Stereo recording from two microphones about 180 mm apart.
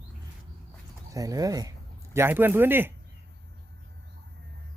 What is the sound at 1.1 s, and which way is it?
Speech, 20° right (ahead or behind).